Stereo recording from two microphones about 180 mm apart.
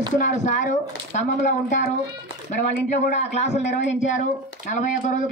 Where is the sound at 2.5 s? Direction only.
40° left (ahead or behind).